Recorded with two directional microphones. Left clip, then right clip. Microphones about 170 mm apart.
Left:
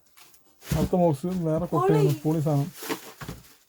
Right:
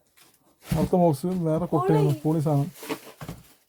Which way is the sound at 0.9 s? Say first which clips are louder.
Right 2 dB; 25° right (ahead or behind).